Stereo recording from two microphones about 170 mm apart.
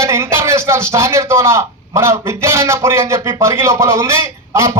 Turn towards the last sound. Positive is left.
turn(degrees=-15)  # may be behind; listen again after turning